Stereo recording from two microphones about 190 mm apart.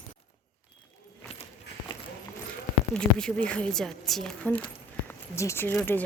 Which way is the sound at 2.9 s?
5° left (ahead or behind).